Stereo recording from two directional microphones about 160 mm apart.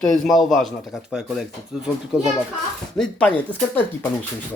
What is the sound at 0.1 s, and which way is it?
Speech, centre (ahead or behind).